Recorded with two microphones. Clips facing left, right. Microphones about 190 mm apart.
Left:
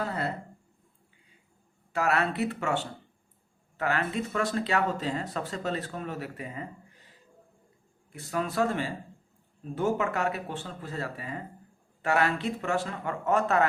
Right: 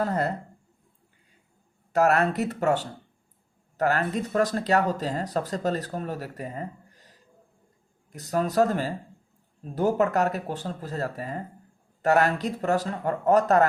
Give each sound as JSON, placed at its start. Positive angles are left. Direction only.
{"t": 0.0, "sound": "speech", "side_deg": -45}
{"t": 1.9, "sound": "speech", "side_deg": -45}